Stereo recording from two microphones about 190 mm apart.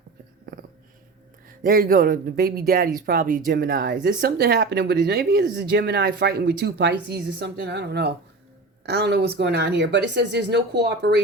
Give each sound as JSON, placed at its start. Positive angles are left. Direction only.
{"t": 1.6, "sound": "speech", "side_deg": -50}